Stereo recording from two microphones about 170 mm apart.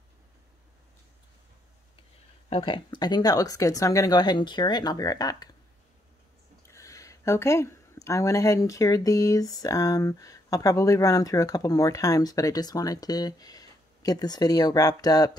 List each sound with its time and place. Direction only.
2.5 s speech: 30° left (ahead or behind)
6.7 s speech: 20° left (ahead or behind)